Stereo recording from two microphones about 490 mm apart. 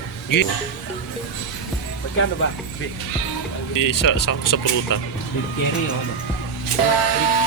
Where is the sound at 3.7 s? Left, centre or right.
Left.